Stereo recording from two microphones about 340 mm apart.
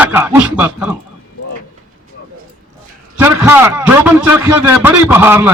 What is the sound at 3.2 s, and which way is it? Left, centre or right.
A man's voice, centre.